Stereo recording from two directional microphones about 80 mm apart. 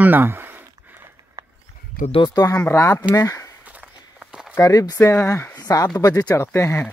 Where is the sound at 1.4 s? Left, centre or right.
Right.